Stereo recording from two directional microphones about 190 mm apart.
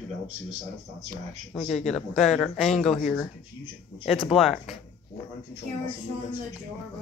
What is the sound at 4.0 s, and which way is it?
Speech, centre (ahead or behind).